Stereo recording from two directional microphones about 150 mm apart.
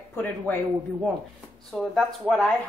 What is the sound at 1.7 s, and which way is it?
Speech, centre (ahead or behind).